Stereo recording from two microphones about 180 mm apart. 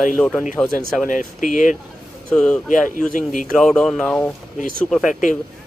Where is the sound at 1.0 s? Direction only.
45° left (ahead or behind).